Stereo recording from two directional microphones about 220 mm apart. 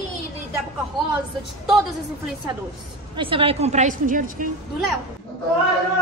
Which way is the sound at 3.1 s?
25° right (ahead or behind).